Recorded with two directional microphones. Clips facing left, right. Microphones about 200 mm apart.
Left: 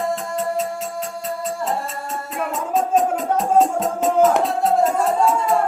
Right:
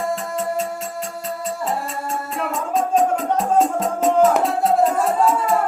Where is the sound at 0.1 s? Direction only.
Centre (ahead or behind).